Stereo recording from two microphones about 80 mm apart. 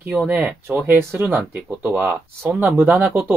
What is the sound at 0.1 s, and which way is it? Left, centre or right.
Speech, centre.